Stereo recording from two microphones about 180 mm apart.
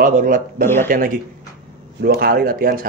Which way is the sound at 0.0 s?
50° right (ahead or behind).